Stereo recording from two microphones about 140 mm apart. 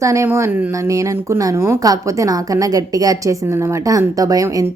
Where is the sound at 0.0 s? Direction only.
20° right (ahead or behind).